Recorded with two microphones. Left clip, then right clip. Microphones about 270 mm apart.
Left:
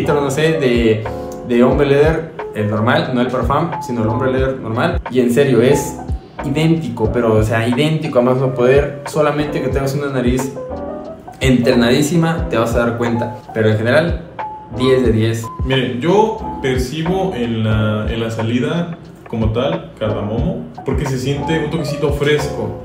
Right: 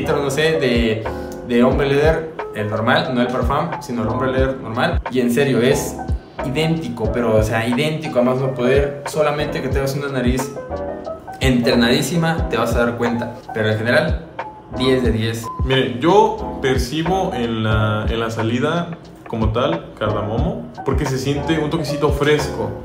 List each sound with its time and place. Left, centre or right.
0.0 s speech: centre
16.6 s mantra: centre
21.2 s mantra: centre